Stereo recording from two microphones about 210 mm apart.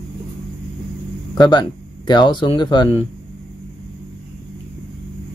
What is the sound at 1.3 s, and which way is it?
Speech, 20° left (ahead or behind).